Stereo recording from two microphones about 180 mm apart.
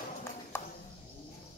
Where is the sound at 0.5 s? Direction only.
15° left (ahead or behind).